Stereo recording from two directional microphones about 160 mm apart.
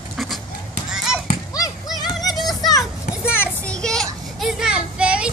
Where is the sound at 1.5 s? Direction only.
20° left (ahead or behind).